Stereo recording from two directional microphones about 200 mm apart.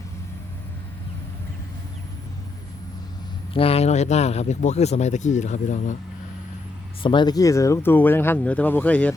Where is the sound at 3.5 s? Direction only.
30° left (ahead or behind).